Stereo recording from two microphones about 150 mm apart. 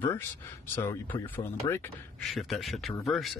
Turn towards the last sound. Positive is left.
turn(degrees=0)  # may be behind; listen again after turning